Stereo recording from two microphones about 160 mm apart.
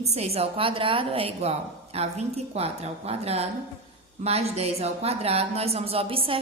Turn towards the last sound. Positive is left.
turn(degrees=-35)  # may be behind; listen again after turning